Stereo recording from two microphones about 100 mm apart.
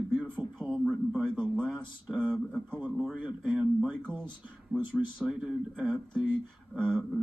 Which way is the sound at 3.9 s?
10° left (ahead or behind).